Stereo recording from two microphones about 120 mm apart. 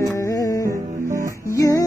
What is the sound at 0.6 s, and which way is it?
Music, 25° right (ahead or behind).